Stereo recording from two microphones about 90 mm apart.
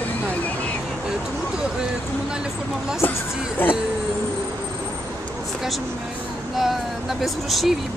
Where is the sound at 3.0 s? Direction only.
20° left (ahead or behind).